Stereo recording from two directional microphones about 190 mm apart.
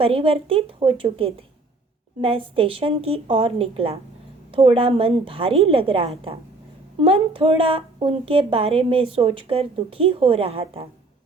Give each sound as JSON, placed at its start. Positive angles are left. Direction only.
{"t": 0.0, "sound": "a woman's voice", "side_deg": -30}